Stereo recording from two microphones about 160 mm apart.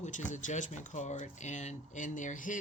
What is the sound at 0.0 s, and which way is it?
Speech, 50° left (ahead or behind).